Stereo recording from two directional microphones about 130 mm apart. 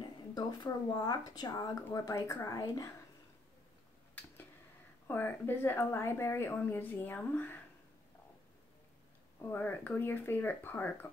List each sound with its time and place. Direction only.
0.3 s a woman's voice: 35° left (ahead or behind)
5.0 s a woman's voice: 15° left (ahead or behind)
9.4 s a woman's voice: 15° left (ahead or behind)